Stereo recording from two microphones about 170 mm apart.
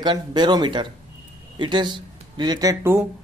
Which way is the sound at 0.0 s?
25° right (ahead or behind).